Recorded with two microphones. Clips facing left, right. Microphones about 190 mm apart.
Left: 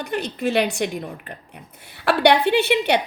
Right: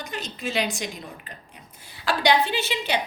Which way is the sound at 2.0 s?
65° left (ahead or behind).